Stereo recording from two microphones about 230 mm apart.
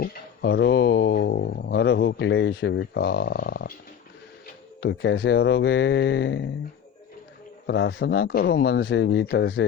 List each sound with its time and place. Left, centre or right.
0.5 s a man's voice: left
4.8 s a man's voice: left
7.7 s a man's voice: left